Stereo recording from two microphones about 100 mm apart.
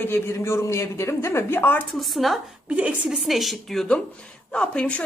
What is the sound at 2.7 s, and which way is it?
Speech, 15° right (ahead or behind).